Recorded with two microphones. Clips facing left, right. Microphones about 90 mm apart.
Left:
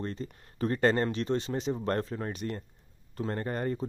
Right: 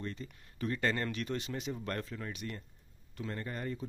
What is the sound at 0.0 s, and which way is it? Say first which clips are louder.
Speech: left 6 dB; 40° left (ahead or behind).